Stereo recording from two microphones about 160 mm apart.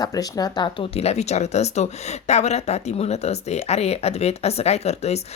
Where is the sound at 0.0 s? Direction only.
25° left (ahead or behind).